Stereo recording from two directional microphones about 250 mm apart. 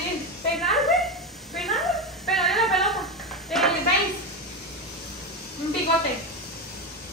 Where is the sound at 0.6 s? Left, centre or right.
Centre.